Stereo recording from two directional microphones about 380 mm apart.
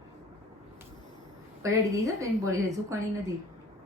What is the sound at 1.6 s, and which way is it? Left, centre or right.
A woman's voice, centre.